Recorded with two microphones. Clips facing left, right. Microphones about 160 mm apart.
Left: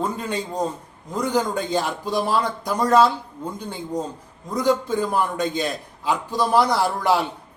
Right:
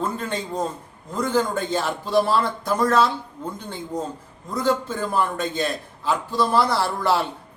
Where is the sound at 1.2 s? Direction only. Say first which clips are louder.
Even; 15° left (ahead or behind).